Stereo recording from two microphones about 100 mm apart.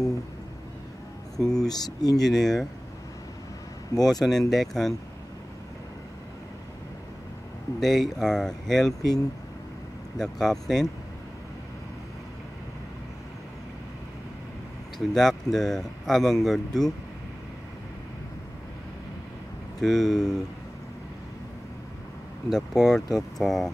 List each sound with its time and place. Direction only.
1.3 s speech: 5° left (ahead or behind)
1.7 s speech: 40° left (ahead or behind)
2.2 s speech: centre (ahead or behind)
4.1 s speech: 5° left (ahead or behind)
7.8 s speech: centre (ahead or behind)
10.1 s speech: 5° left (ahead or behind)
15.0 s speech: 5° left (ahead or behind)
19.8 s speech: centre (ahead or behind)
22.5 s speech: 5° left (ahead or behind)
23.0 s speech: 40° left (ahead or behind)
23.4 s speech: centre (ahead or behind)